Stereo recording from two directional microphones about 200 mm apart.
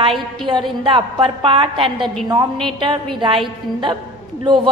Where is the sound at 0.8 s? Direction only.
25° right (ahead or behind).